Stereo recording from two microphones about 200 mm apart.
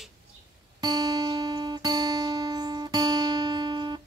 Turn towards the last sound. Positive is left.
turn(degrees=-20)  # may be behind; listen again after turning